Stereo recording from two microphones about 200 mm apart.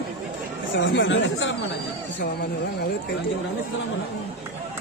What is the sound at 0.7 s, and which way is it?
Speech, 65° left (ahead or behind).